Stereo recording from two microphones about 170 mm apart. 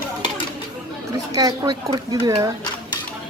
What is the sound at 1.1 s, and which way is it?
Speech, 20° right (ahead or behind).